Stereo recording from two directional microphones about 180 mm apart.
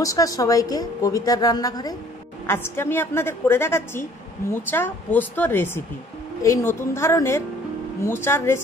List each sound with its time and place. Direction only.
0.0 s a woman's voice: 20° left (ahead or behind)